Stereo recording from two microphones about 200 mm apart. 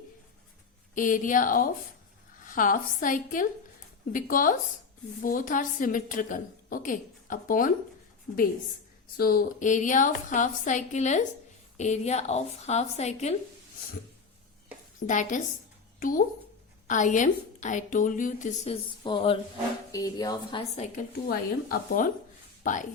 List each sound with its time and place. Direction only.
0.9 s a woman's voice: 40° left (ahead or behind)
9.1 s a woman's voice: 50° left (ahead or behind)
14.9 s a woman's voice: 40° left (ahead or behind)
21.2 s a woman's voice: 45° left (ahead or behind)